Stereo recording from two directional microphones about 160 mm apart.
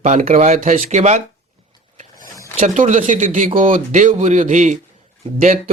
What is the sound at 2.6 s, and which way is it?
Speech, 50° right (ahead or behind).